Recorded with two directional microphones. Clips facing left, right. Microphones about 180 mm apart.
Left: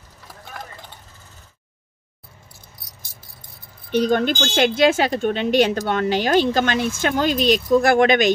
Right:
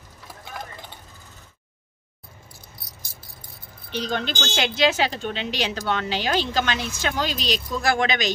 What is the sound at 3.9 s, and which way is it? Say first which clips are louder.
Speech: left 9 dB; 50° left (ahead or behind).